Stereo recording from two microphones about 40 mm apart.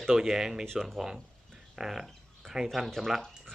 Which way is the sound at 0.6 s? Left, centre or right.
Centre.